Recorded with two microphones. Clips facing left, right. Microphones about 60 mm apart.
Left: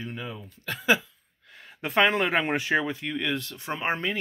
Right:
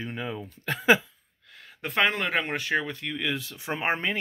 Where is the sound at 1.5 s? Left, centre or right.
Centre.